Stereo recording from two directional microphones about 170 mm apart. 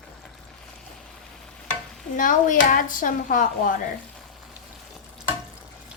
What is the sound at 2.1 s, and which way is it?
Speech, 50° left (ahead or behind).